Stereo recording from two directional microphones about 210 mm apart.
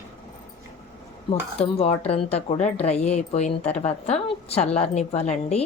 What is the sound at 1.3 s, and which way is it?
A woman's voice, 30° left (ahead or behind).